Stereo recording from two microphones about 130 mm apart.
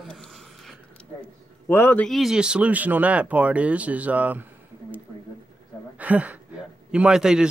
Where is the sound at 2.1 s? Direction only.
Centre (ahead or behind).